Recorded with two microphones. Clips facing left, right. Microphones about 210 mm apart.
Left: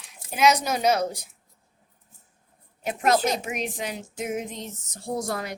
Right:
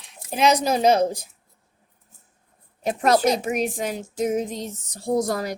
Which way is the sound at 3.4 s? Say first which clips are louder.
Right 6 dB; 40° right (ahead or behind).